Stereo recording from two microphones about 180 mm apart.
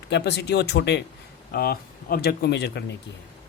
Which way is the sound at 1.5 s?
55° left (ahead or behind).